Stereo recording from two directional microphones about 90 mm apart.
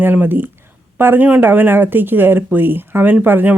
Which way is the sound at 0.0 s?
20° right (ahead or behind).